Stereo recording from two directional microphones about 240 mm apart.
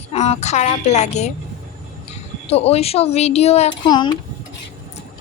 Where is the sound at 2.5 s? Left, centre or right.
Left.